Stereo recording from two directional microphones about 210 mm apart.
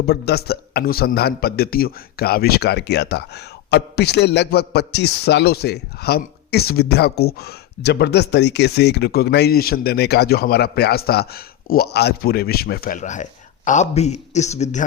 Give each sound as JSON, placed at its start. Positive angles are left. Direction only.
{"t": 0.0, "sound": "a man's voice", "side_deg": 50}